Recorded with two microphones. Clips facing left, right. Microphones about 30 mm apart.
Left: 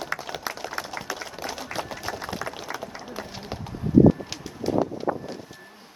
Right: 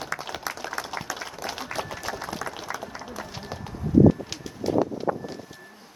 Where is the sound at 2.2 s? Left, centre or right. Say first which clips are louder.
Left 1 dB; centre.